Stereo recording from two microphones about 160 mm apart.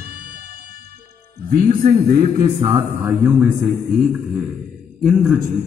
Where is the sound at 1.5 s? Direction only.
65° right (ahead or behind).